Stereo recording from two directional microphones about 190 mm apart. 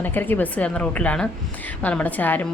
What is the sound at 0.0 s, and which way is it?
Speech, 10° left (ahead or behind).